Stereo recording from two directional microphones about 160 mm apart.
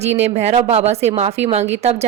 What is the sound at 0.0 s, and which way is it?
A man's voice, 45° right (ahead or behind).